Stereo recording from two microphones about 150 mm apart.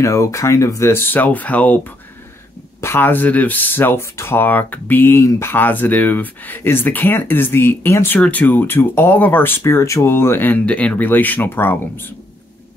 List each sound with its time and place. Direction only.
0.0 s speech: 20° left (ahead or behind)
2.8 s speech: 15° left (ahead or behind)